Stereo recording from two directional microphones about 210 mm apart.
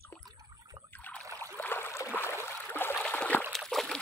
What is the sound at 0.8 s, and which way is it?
Rowboat, 10° left (ahead or behind).